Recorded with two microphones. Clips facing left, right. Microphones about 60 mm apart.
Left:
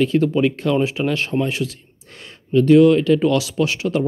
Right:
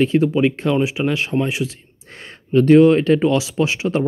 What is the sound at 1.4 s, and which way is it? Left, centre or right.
Speech, right.